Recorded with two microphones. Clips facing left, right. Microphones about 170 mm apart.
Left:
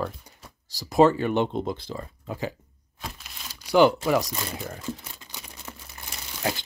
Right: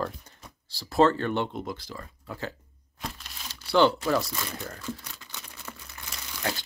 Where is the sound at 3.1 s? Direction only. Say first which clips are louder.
Even; 10° left (ahead or behind).